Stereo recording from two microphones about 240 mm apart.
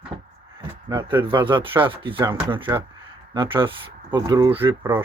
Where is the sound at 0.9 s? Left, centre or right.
Centre.